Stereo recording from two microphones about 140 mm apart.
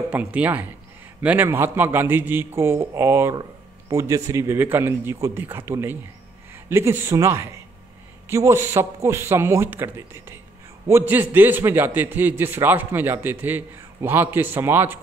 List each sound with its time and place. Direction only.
0.1 s a man's voice: 10° right (ahead or behind)